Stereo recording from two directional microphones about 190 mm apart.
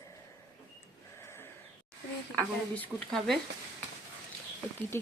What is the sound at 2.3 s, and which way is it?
A woman's voice, 5° left (ahead or behind).